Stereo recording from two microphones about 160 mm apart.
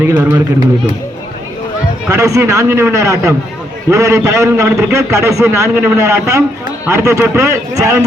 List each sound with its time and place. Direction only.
0.0 s a man's voice: 15° right (ahead or behind)
2.0 s a man's voice: 20° right (ahead or behind)
4.7 s speech: 5° right (ahead or behind)
4.9 s a man's voice: 20° right (ahead or behind)